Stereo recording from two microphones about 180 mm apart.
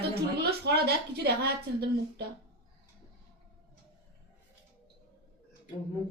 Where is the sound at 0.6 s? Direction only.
65° right (ahead or behind).